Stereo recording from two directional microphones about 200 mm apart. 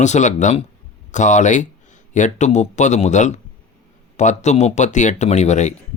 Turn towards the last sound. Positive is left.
turn(degrees=35)  # may be behind; listen again after turning